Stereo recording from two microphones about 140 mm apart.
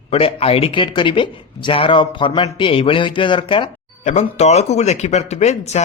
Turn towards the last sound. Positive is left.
turn(degrees=50)  # may be behind; listen again after turning